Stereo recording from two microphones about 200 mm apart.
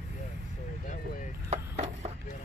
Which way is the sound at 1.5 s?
35° right (ahead or behind).